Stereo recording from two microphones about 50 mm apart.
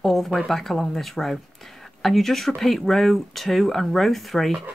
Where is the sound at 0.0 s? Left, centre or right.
Centre.